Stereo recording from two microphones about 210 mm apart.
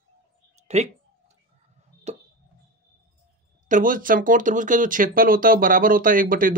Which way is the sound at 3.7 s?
40° right (ahead or behind).